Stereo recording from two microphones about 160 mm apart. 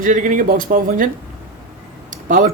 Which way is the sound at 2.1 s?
55° right (ahead or behind).